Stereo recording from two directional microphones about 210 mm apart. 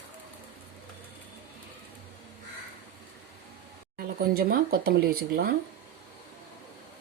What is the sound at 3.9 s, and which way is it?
Speech, 45° right (ahead or behind).